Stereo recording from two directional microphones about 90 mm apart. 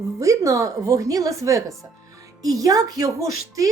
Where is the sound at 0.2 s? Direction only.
40° right (ahead or behind).